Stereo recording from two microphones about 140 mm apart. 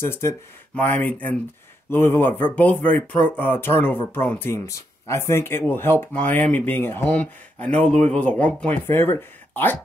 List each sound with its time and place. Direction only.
0.0 s speech: 20° left (ahead or behind)